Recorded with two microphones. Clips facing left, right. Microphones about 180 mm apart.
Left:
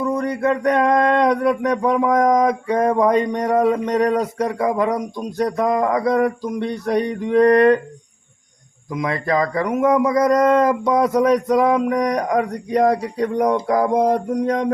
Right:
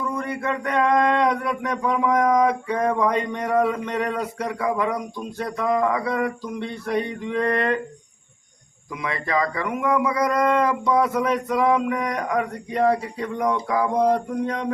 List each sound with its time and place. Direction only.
0.0 s speech: 40° left (ahead or behind)
8.9 s speech: 40° left (ahead or behind)
14.0 s mantra: 45° left (ahead or behind)